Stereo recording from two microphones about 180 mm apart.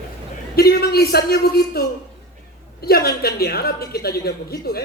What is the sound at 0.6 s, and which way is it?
Speech, 60° left (ahead or behind).